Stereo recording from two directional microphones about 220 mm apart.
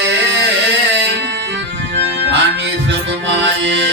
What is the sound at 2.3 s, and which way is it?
Music, 50° right (ahead or behind).